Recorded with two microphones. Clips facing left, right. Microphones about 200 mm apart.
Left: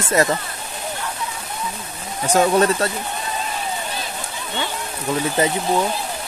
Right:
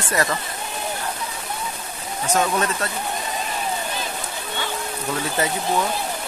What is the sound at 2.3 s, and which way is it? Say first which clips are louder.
Speech: left 6 dB; 35° left (ahead or behind).